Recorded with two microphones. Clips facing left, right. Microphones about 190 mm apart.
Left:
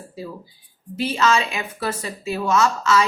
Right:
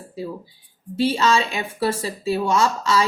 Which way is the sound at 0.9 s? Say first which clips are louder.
Right 1 dB; 30° right (ahead or behind).